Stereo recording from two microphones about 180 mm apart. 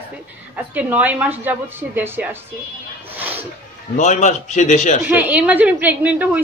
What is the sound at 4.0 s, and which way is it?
A man's voice, 40° left (ahead or behind).